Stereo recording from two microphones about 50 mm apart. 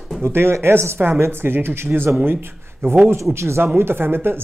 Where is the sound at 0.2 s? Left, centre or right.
Right.